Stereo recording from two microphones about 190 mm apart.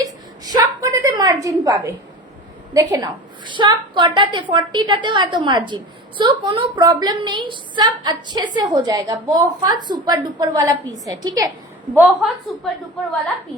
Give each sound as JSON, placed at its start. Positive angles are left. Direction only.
{"t": 0.0, "sound": "a sound", "side_deg": -20}
{"t": 2.7, "sound": "a woman's voice", "side_deg": -20}
{"t": 11.9, "sound": "a woman's voice", "side_deg": 0}